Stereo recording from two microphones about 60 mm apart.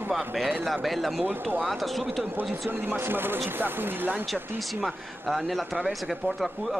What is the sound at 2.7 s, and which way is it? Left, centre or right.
Speech, right.